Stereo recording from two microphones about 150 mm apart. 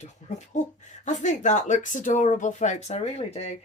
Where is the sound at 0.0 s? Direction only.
50° left (ahead or behind).